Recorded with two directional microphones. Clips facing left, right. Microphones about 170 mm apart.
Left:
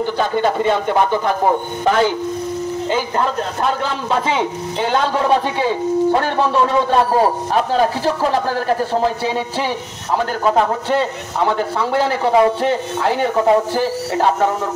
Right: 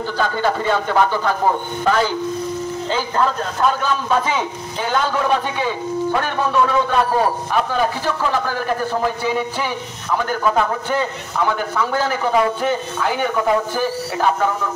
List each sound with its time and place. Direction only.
0.0 s a man's voice: 20° left (ahead or behind)
4.1 s a man's voice: 25° left (ahead or behind)